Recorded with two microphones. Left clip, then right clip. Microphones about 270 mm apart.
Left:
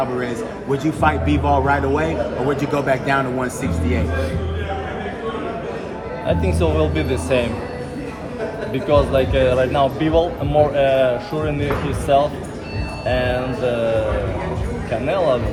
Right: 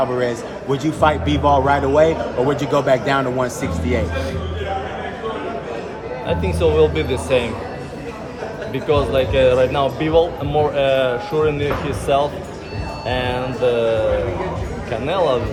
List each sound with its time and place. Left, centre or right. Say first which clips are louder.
0.2 s a man's voice: right 3 dB; right
6.2 s speech: right 1 dB; centre
8.7 s speech: left 1 dB; centre
15.0 s a man's voice: even; centre